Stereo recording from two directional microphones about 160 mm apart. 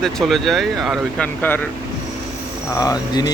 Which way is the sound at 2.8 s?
25° left (ahead or behind).